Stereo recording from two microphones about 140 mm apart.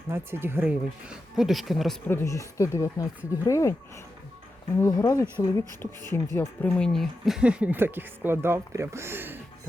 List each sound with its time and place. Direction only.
0.1 s speech: 15° right (ahead or behind); by 2.0 s centre (ahead or behind)
2.0 s speech: 20° left (ahead or behind)
4.8 s speech: 25° left (ahead or behind); by 9.4 s 15° right (ahead or behind)